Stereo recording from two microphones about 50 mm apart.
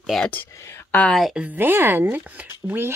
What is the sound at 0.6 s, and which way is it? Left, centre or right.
Speech, left.